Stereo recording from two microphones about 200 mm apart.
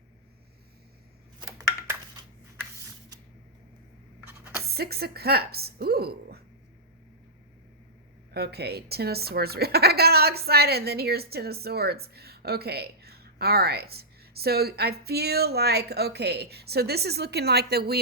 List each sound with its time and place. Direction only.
1.4 s a sound: 15° right (ahead or behind)
4.7 s speech: 50° right (ahead or behind)
8.3 s speech: 55° right (ahead or behind)